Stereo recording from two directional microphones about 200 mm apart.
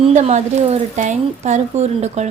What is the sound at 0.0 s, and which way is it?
Speech, 35° right (ahead or behind).